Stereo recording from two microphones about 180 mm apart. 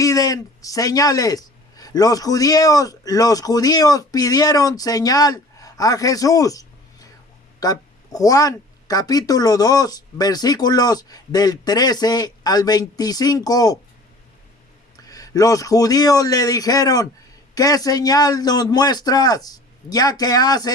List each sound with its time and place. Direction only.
0.0 s speech: 20° left (ahead or behind)
14.9 s a man's voice: 20° left (ahead or behind)